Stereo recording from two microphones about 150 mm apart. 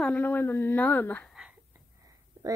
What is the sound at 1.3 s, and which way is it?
Whispering, 5° right (ahead or behind).